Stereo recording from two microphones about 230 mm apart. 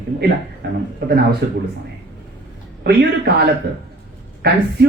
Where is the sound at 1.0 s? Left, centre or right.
Right.